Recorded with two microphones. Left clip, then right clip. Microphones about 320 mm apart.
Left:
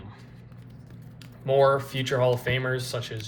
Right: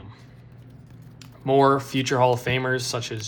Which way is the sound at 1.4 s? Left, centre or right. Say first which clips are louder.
Right 2 dB; centre.